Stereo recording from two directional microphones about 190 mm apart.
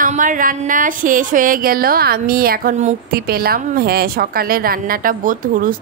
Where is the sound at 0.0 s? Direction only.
45° right (ahead or behind).